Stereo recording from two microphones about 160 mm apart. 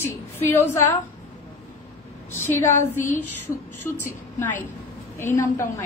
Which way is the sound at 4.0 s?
15° left (ahead or behind).